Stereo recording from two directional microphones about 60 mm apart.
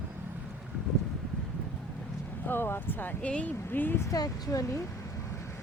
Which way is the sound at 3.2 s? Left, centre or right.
Left.